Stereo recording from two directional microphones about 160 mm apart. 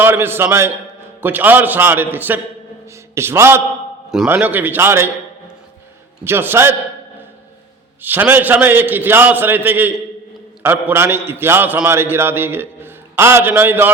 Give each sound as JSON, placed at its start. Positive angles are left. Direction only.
{"t": 0.0, "sound": "a man's voice", "side_deg": -15}
{"t": 6.2, "sound": "a man's voice", "side_deg": -15}
{"t": 8.0, "sound": "a man's voice", "side_deg": -10}